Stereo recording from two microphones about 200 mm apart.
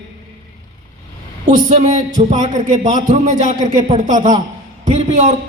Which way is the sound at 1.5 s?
35° right (ahead or behind).